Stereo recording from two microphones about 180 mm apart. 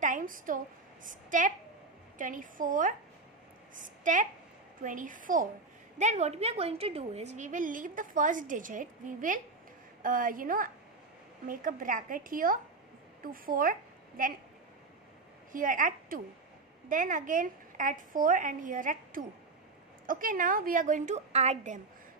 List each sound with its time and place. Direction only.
0.0 s a sound: 45° right (ahead or behind)
1.0 s a woman's voice: 45° right (ahead or behind)
15.5 s a woman's voice: 50° right (ahead or behind)